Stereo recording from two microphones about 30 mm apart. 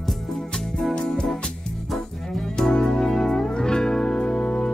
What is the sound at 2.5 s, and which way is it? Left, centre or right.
Music, left.